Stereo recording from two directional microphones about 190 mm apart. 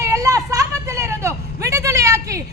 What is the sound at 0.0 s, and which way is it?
Vehicle, 15° right (ahead or behind).